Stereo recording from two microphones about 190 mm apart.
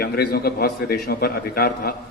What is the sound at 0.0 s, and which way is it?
A man's voice, 55° left (ahead or behind).